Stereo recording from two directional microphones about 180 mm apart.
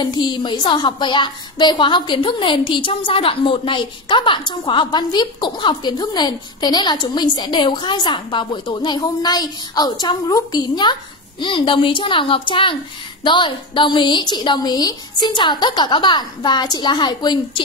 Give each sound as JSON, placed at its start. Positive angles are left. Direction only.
{"t": 0.0, "sound": "a woman's voice", "side_deg": 25}